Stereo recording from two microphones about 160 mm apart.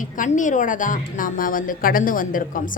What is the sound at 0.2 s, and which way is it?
A woman's voice, 55° left (ahead or behind).